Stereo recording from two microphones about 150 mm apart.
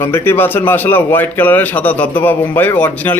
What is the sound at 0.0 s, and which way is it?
A man's voice, 15° left (ahead or behind).